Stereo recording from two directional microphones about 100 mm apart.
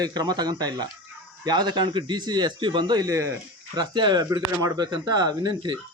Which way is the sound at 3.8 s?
45° right (ahead or behind).